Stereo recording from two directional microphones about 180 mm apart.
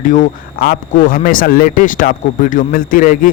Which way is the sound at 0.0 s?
45° left (ahead or behind).